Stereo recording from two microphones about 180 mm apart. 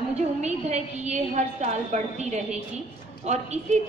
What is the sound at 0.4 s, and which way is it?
A woman's voice, 40° right (ahead or behind).